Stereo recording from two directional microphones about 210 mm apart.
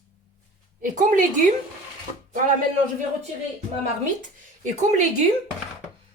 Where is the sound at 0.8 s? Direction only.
40° right (ahead or behind).